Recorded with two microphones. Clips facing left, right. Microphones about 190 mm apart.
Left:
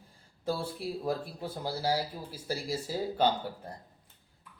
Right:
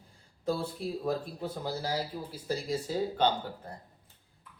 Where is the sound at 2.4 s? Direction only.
5° left (ahead or behind).